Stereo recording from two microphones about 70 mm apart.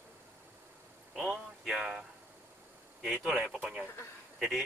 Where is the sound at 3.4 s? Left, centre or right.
Right.